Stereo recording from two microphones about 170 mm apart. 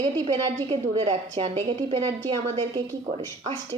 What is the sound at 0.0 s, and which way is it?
Speech, 30° right (ahead or behind).